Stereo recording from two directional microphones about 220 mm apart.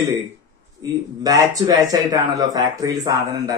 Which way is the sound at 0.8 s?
15° right (ahead or behind).